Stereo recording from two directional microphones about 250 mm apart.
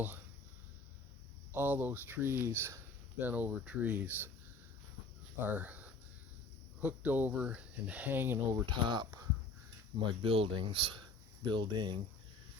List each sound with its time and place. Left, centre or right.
1.5 s speech: centre
5.4 s speech: centre
8.6 s speech: centre